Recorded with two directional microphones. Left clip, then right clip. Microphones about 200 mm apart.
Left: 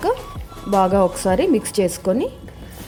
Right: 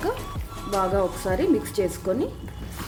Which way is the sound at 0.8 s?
35° left (ahead or behind).